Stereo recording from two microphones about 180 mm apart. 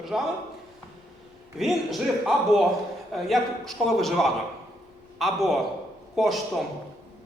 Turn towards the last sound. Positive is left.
turn(degrees=0)  # may be behind; listen again after turning